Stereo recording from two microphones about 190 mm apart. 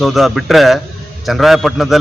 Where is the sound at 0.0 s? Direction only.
Centre (ahead or behind).